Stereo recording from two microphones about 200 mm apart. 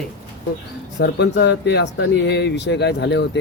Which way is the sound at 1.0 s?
60° left (ahead or behind).